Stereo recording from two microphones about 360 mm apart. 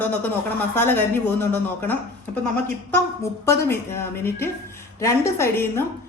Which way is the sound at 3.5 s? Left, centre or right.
Centre.